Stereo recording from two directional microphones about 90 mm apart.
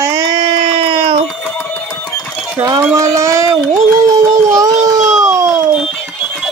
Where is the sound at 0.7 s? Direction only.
90° right.